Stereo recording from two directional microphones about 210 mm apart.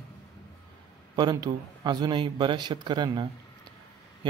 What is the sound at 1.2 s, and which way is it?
Speech, 20° right (ahead or behind).